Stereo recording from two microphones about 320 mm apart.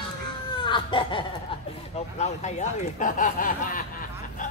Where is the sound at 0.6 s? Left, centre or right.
Centre.